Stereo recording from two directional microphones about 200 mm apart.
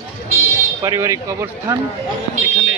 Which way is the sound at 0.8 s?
15° right (ahead or behind).